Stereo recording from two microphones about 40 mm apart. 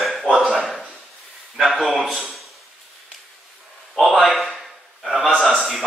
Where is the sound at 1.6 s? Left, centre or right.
Centre.